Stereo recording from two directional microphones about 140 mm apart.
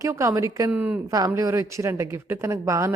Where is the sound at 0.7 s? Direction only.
10° right (ahead or behind).